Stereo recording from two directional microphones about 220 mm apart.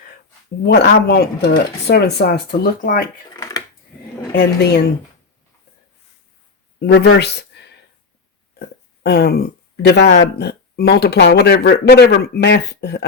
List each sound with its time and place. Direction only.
0.6 s speech: 50° left (ahead or behind)
3.3 s a sound: 15° left (ahead or behind)
4.4 s speech: 50° left (ahead or behind)
6.7 s speech: 50° left (ahead or behind)
9.0 s speech: 50° left (ahead or behind)